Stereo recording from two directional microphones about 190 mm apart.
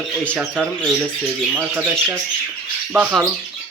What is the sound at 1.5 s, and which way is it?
Speech, 10° right (ahead or behind).